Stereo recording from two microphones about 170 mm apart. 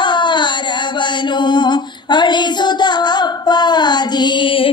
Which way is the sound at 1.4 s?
25° left (ahead or behind).